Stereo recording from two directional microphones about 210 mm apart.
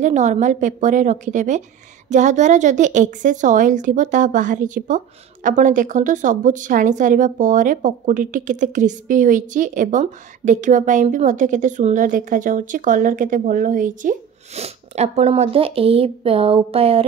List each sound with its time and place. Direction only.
0.0 s a woman's voice: 35° right (ahead or behind)